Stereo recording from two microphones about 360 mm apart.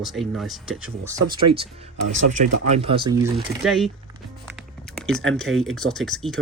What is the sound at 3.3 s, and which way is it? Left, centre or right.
Speech, centre.